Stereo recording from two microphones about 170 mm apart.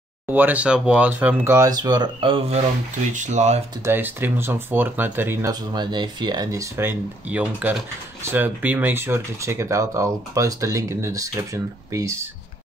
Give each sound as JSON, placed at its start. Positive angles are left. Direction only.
{"t": 0.3, "sound": "speech", "side_deg": -10}
{"t": 3.1, "sound": "speech", "side_deg": -45}
{"t": 3.8, "sound": "speech", "side_deg": -10}